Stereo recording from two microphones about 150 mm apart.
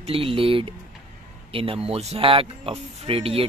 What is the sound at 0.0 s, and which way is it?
Speech, 40° right (ahead or behind).